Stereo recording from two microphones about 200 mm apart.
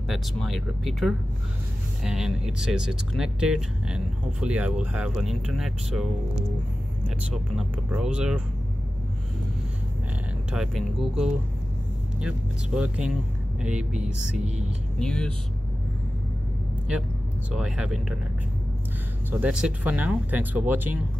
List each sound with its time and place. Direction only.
0.1 s speech: centre (ahead or behind)
7.1 s speech: 5° right (ahead or behind)
10.5 s speech: centre (ahead or behind)
17.6 s speech: 5° right (ahead or behind)
19.4 s speech: 5° right (ahead or behind)